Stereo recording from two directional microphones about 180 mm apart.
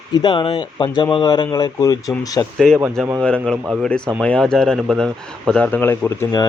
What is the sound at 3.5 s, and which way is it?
Speech, 10° right (ahead or behind).